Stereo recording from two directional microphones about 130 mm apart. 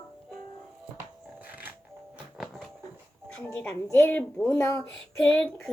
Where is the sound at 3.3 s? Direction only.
10° left (ahead or behind).